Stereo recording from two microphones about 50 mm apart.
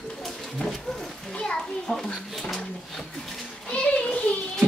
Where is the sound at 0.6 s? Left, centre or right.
Centre.